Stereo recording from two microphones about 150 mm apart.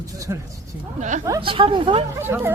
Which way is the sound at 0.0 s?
20° right (ahead or behind).